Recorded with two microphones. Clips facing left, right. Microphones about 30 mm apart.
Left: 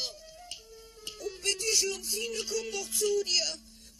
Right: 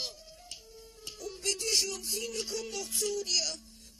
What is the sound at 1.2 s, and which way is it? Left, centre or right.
Music, left.